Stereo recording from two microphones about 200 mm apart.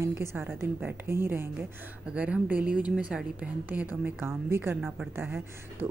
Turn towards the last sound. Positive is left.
turn(degrees=-10)  # may be behind; listen again after turning